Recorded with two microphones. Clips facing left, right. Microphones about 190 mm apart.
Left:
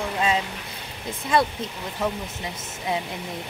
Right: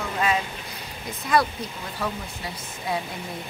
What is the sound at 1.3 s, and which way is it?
Speech, 25° left (ahead or behind).